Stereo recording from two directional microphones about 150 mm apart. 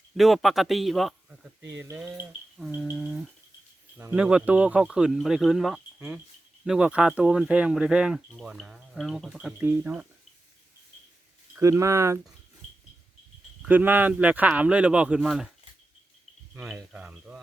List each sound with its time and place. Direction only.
0.2 s speech: centre (ahead or behind)
1.5 s speech: 15° right (ahead or behind)
3.9 s speech: 10° right (ahead or behind)
11.5 s speech: 20° right (ahead or behind)
13.6 s speech: 10° right (ahead or behind)
16.7 s speech: 10° right (ahead or behind)